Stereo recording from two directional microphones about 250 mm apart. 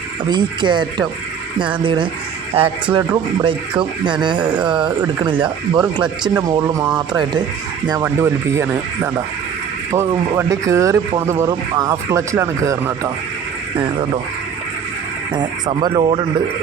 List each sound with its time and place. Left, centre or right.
0.3 s a man's voice: centre
9.9 s speech: centre
15.3 s speech: centre